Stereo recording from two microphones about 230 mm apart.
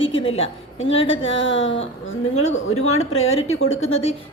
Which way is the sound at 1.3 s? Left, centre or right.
Left.